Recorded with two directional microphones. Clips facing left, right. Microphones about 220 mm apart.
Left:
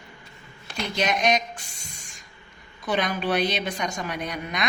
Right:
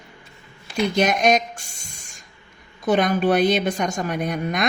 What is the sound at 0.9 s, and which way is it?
Speech, 50° right (ahead or behind).